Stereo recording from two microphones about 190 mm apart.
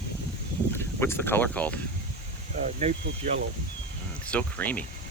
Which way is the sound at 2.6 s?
40° right (ahead or behind).